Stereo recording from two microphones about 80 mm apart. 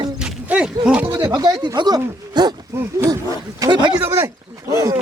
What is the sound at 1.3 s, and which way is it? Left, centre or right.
Speech, right.